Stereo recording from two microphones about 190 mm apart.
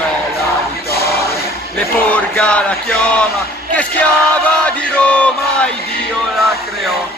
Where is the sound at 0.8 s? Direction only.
55° left (ahead or behind).